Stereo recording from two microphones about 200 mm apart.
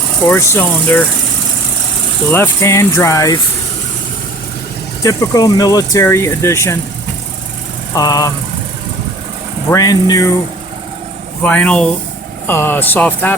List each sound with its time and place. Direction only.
0.3 s speech: 10° left (ahead or behind)
2.3 s speech: 10° left (ahead or behind)
5.0 s speech: 20° left (ahead or behind)
7.9 s speech: 15° left (ahead or behind)
9.6 s speech: 15° left (ahead or behind)
11.4 s speech: 5° left (ahead or behind)